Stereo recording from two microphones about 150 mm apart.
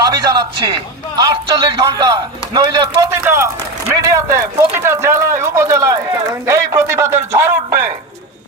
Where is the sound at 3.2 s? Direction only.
15° right (ahead or behind).